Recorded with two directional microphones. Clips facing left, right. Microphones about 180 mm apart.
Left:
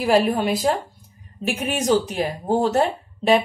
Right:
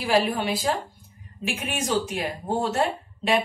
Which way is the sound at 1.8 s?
40° left (ahead or behind).